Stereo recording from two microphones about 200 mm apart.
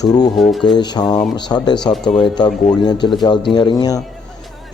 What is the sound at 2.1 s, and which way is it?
Speech, 20° left (ahead or behind).